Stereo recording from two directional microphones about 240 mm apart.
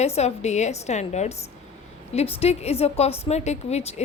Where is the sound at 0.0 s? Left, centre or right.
Left.